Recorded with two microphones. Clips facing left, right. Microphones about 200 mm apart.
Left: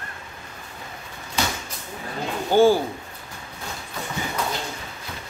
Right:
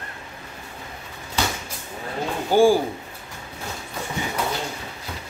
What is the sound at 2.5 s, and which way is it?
Speech, 10° right (ahead or behind).